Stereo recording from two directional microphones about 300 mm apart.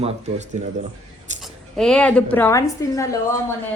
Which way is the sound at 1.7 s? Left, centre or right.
Centre.